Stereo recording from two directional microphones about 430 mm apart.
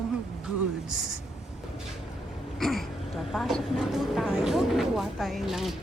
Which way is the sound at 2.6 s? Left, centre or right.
Centre.